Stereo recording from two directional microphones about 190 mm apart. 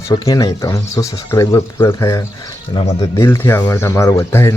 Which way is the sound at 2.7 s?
25° left (ahead or behind).